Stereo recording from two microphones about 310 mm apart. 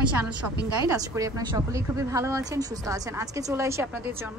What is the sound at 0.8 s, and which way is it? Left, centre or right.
Speech, centre.